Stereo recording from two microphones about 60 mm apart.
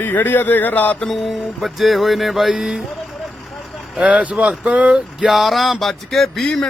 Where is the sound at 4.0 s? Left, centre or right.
Centre.